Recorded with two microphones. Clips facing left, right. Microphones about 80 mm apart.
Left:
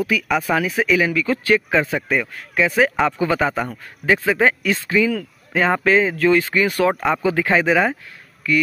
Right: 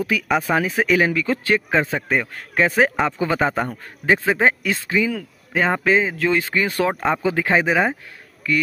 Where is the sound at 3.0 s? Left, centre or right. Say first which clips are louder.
Left 1 dB; right.